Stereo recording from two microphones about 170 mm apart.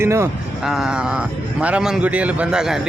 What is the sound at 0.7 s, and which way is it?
A man's voice, 5° right (ahead or behind).